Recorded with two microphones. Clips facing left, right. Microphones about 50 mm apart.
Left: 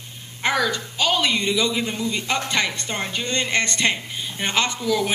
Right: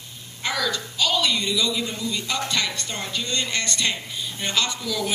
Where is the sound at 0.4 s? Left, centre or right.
Left.